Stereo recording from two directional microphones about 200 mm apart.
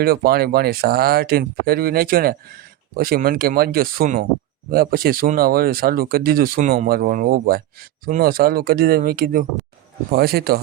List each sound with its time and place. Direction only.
0.0 s speech: 50° right (ahead or behind)